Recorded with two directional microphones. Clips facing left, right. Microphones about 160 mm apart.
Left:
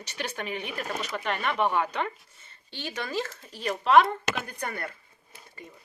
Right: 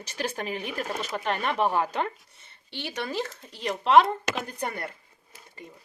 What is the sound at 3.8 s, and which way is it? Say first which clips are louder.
Speech: right 1 dB; 30° right (ahead or behind).